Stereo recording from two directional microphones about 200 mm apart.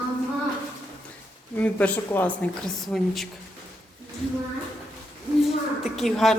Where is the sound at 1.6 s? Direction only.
5° left (ahead or behind).